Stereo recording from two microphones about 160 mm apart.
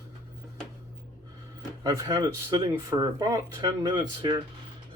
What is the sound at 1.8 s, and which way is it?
Speech, 25° right (ahead or behind).